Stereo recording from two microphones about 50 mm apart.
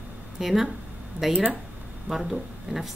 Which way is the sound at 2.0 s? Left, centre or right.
Centre.